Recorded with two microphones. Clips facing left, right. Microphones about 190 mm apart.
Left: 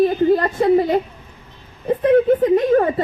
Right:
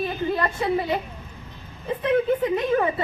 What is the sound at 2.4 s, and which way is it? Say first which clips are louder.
Speech: left 7 dB; 45° left (ahead or behind).